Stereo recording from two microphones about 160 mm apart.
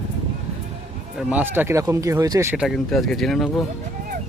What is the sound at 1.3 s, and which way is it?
Speech, 10° right (ahead or behind).